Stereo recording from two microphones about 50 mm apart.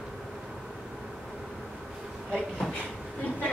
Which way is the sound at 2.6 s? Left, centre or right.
Centre.